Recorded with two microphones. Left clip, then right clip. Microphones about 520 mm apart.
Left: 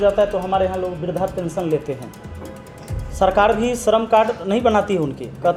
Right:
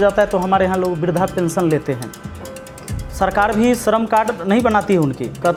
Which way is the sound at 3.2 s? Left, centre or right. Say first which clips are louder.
Even; right.